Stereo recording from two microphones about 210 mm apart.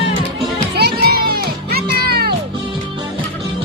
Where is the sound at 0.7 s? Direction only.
50° right (ahead or behind).